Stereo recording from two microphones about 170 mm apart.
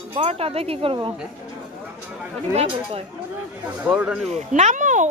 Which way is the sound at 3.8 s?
10° right (ahead or behind).